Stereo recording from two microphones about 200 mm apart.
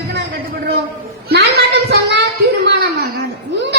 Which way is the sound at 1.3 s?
55° right (ahead or behind).